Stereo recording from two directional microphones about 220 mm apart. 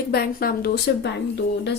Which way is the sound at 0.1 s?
45° left (ahead or behind).